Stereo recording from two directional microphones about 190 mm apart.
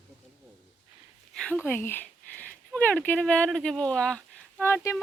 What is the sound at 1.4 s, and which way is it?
Speech, 10° left (ahead or behind).